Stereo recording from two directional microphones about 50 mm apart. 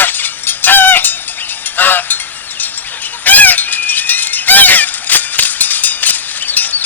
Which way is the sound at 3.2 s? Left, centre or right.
Left.